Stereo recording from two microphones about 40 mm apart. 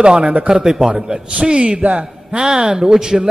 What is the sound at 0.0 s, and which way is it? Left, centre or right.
Speech, right.